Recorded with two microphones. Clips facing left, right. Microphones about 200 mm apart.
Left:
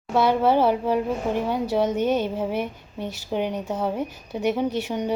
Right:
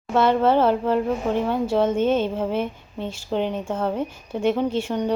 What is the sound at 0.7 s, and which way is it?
Speech, 15° left (ahead or behind).